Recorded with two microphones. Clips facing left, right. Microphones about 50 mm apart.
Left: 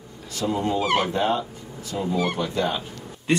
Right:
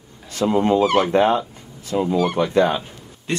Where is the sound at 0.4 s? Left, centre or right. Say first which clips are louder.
Right 7 dB; right.